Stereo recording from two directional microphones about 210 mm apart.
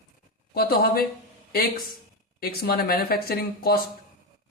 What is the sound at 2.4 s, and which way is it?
Speech, 45° left (ahead or behind).